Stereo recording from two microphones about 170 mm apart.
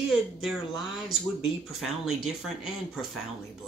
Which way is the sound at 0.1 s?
Centre (ahead or behind).